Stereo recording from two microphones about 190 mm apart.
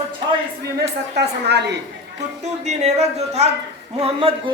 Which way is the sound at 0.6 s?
60° right (ahead or behind).